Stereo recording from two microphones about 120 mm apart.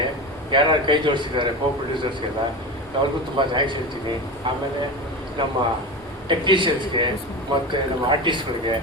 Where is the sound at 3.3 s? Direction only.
40° right (ahead or behind).